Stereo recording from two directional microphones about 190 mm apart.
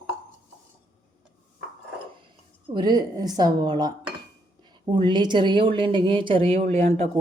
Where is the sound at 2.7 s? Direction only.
20° right (ahead or behind).